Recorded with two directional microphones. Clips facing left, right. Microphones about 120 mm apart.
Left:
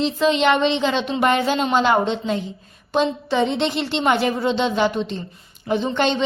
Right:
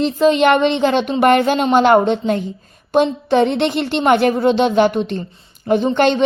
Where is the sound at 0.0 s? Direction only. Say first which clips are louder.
Right 5 dB; 45° right (ahead or behind).